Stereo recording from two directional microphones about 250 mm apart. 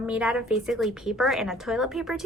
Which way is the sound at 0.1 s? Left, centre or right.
Centre.